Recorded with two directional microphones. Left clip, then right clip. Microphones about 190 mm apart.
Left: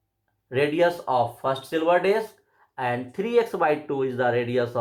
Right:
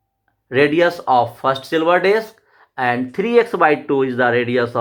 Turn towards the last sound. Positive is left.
turn(degrees=-40)  # may be behind; listen again after turning